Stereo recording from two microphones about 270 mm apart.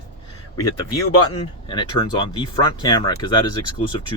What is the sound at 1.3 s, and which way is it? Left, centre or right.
Speech, centre.